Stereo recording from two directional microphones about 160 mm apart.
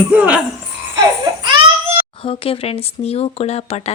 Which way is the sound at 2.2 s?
35° left (ahead or behind).